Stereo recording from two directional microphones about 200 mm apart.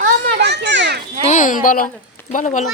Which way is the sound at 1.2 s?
40° left (ahead or behind).